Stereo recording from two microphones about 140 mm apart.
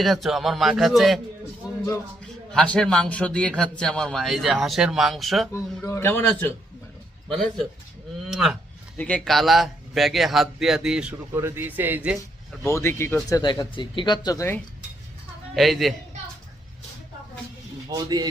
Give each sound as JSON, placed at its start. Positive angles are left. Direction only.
{"t": 0.0, "sound": "speech", "side_deg": 0}
{"t": 2.2, "sound": "a man's voice", "side_deg": 5}
{"t": 5.5, "sound": "a man's voice", "side_deg": 20}
{"t": 7.3, "sound": "speech", "side_deg": 5}
{"t": 9.0, "sound": "speech", "side_deg": 10}
{"t": 11.3, "sound": "speech", "side_deg": -20}
{"t": 12.6, "sound": "a man's voice", "side_deg": 20}
{"t": 13.3, "sound": "speech", "side_deg": 30}
{"t": 15.5, "sound": "speech", "side_deg": 0}
{"t": 17.8, "sound": "a man's voice", "side_deg": -30}